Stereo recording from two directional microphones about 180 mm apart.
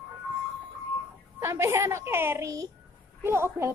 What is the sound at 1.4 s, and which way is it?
Speech, 15° right (ahead or behind).